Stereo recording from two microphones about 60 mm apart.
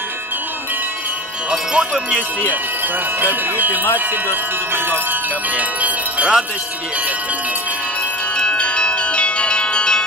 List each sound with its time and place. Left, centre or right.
1.5 s wind chime: centre
3.2 s wind chime: right
5.6 s bell: right
8.4 s bell: centre